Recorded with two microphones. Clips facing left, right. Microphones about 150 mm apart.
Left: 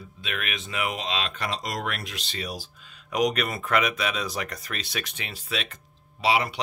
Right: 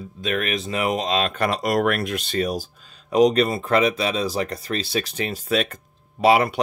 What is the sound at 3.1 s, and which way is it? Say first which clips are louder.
Speech: right 8 dB; 30° right (ahead or behind).